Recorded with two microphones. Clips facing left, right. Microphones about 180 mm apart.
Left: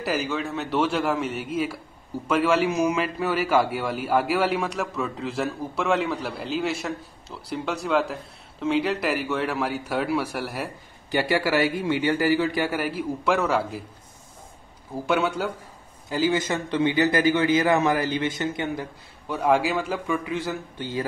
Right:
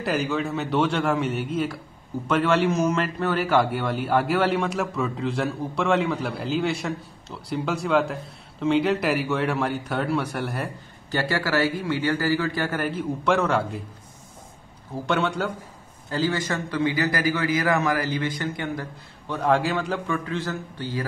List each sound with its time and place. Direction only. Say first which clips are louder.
0.0 s a man's voice: right 2 dB; centre (ahead or behind)
15.0 s a man's voice: left 1 dB; 5° left (ahead or behind)
16.1 s a man's voice: left 2 dB; 15° left (ahead or behind)
19.2 s a man's voice: left 1 dB; 10° left (ahead or behind)